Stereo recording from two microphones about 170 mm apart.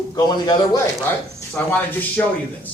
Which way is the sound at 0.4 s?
25° left (ahead or behind).